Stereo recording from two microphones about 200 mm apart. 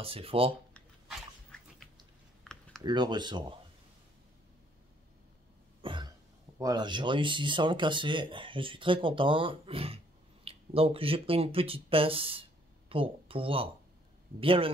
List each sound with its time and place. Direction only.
0.0 s speech: 30° right (ahead or behind)
1.5 s dog: 5° left (ahead or behind)
2.4 s a sound: 5° left (ahead or behind)
2.8 s speech: 20° right (ahead or behind)
5.8 s cough: 25° right (ahead or behind)
6.6 s speech: 20° right (ahead or behind)